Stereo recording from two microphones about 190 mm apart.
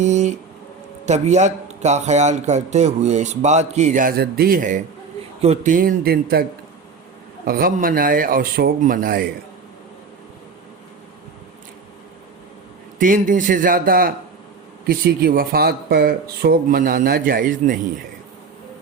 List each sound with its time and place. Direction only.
0.0 s a man's voice: 35° right (ahead or behind)
7.4 s speech: 50° right (ahead or behind)
13.0 s speech: 45° right (ahead or behind)